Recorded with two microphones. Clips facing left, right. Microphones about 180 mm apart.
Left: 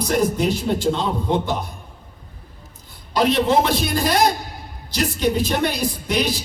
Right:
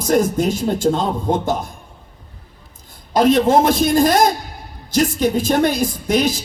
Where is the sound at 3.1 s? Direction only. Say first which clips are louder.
Right 4 dB; 45° right (ahead or behind).